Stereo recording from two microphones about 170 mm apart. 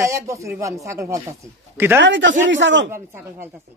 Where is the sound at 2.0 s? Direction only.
90° right.